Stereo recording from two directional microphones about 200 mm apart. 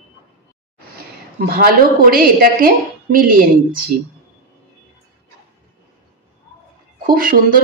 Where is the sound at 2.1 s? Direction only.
45° right (ahead or behind).